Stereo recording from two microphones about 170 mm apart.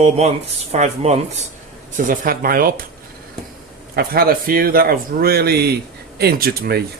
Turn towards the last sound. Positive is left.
turn(degrees=-65)  # may be behind; listen again after turning